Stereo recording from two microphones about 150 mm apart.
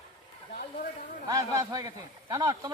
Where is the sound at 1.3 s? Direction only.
25° right (ahead or behind).